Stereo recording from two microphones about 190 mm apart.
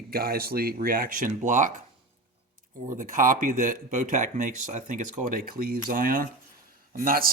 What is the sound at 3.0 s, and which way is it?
Speech, 45° right (ahead or behind).